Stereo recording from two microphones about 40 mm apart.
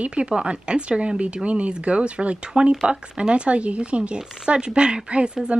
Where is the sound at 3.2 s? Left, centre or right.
Right.